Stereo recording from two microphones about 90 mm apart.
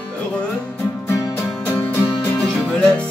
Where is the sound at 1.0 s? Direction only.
30° left (ahead or behind).